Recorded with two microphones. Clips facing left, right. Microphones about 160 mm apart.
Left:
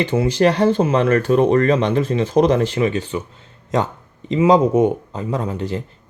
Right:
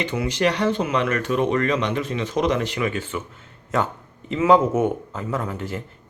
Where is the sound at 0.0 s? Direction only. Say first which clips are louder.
Left 6 dB; 30° left (ahead or behind).